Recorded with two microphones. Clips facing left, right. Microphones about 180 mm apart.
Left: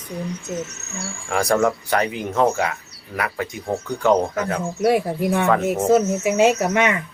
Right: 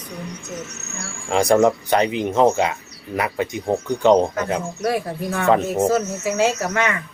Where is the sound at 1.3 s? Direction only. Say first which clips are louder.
Right 3 dB; 20° right (ahead or behind).